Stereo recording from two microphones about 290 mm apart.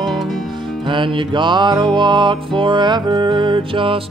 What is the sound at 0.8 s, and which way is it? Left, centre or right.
Music, centre.